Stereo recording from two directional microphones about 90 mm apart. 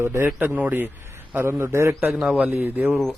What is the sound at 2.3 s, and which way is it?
Speech, 20° right (ahead or behind).